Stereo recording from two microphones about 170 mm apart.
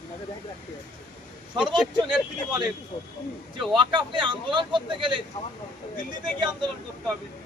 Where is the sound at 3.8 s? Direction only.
30° right (ahead or behind).